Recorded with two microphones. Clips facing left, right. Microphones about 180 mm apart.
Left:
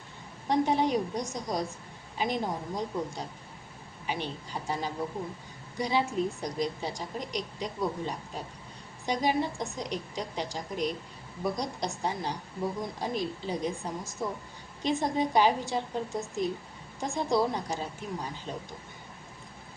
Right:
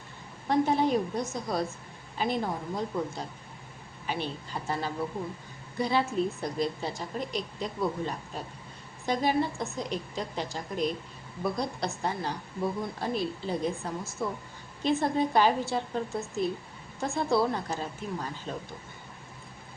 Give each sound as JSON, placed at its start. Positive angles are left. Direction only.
{"t": 0.4, "sound": "a woman's voice", "side_deg": 15}